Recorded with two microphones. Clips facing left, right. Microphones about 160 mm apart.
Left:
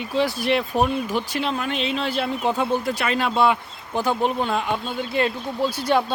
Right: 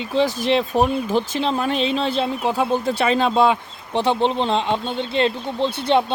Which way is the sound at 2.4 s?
10° right (ahead or behind).